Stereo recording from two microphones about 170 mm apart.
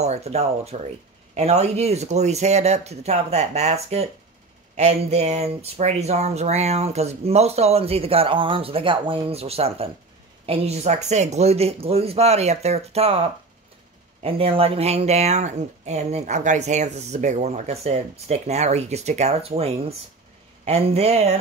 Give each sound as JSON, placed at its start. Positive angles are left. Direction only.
{"t": 0.0, "sound": "speech", "side_deg": -40}